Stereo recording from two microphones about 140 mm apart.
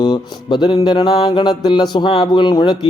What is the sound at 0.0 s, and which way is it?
Speech, 30° left (ahead or behind).